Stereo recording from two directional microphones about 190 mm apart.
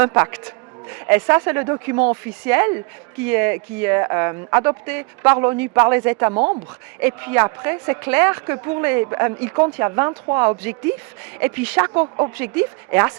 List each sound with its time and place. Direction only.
0.0 s a woman's voice: 15° right (ahead or behind)
6.3 s a woman's voice: 30° right (ahead or behind)
7.0 s a woman's voice: 10° right (ahead or behind)